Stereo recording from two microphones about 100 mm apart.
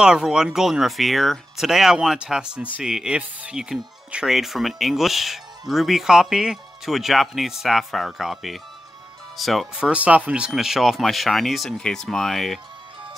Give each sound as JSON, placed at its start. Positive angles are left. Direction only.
{"t": 0.0, "sound": "speech", "side_deg": -5}
{"t": 9.8, "sound": "speech", "side_deg": -10}